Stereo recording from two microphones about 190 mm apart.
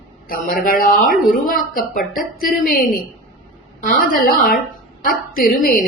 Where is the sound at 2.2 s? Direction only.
45° left (ahead or behind).